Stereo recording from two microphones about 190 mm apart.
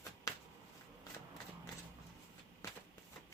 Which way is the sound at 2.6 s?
15° left (ahead or behind).